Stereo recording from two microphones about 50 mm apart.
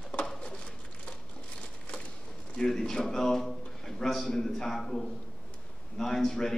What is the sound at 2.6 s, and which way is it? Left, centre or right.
A man's voice, centre.